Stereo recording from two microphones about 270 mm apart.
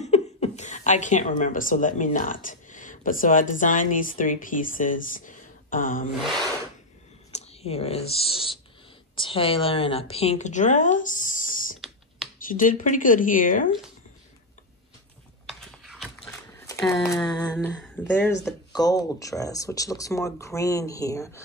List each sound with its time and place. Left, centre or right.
0.0 s speech: left
7.3 s a woman's voice: left
15.4 s a sound: centre
17.6 s speech: centre